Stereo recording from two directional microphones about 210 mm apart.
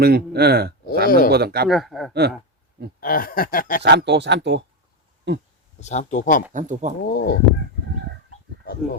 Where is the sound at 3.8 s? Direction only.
55° right (ahead or behind).